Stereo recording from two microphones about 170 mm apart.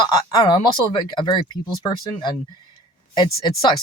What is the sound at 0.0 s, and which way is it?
Speech, 20° left (ahead or behind).